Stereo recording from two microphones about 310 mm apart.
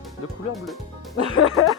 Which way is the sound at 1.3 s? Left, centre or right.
Left.